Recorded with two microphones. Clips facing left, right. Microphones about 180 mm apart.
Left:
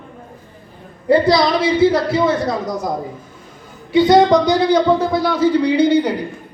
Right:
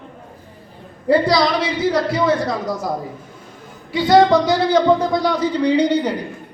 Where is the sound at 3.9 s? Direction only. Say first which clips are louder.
Left 2 dB; 20° left (ahead or behind).